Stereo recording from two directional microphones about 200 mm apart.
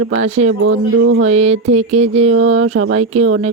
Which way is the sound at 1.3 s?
35° right (ahead or behind).